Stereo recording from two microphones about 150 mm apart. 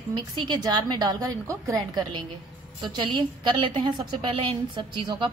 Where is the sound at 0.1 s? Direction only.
30° right (ahead or behind).